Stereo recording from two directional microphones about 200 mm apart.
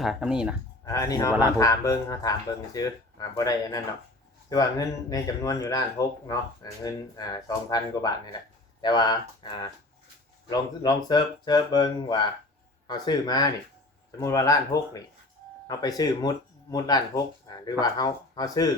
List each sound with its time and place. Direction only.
0.0 s speech: centre (ahead or behind)
0.9 s speech: 15° left (ahead or behind)